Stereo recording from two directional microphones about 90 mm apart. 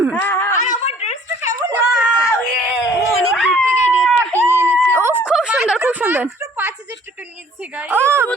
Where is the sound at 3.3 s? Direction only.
5° left (ahead or behind).